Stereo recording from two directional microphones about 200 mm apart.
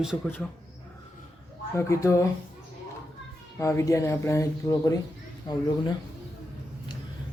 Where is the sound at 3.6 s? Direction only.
15° left (ahead or behind).